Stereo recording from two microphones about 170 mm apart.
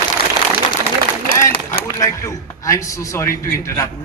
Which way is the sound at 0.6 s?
30° left (ahead or behind).